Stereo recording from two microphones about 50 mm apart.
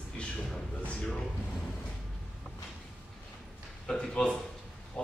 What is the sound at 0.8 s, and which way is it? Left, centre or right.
Speech, centre.